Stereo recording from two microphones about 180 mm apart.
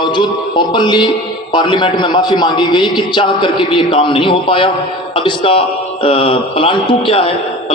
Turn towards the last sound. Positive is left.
turn(degrees=30)  # may be behind; listen again after turning